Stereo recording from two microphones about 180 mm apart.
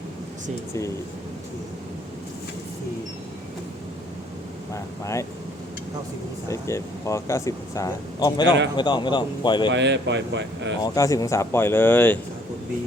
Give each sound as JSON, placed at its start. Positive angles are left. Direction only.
{"t": 4.7, "sound": "speech", "side_deg": 15}
{"t": 6.5, "sound": "speech", "side_deg": 15}
{"t": 9.7, "sound": "speech", "side_deg": -80}
{"t": 10.8, "sound": "speech", "side_deg": 20}